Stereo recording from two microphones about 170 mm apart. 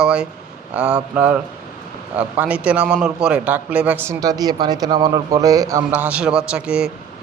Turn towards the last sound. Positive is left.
turn(degrees=-5)  # may be behind; listen again after turning